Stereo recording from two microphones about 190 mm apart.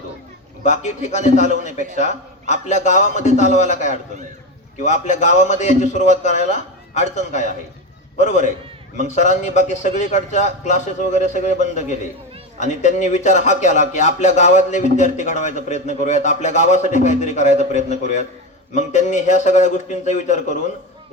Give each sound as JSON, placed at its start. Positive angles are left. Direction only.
{"t": 0.6, "sound": "speech", "side_deg": 40}